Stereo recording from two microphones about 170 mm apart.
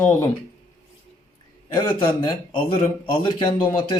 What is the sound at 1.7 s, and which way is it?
Speech, 25° left (ahead or behind).